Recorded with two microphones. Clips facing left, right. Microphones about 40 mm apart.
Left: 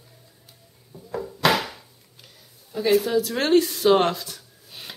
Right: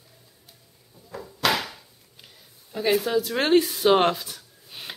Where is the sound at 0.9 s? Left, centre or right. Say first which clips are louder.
Left 8 dB; centre.